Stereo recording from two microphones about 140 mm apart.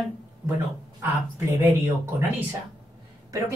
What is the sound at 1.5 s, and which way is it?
Speech, 15° right (ahead or behind).